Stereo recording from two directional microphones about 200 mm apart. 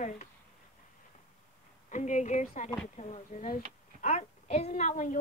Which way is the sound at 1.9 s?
35° left (ahead or behind).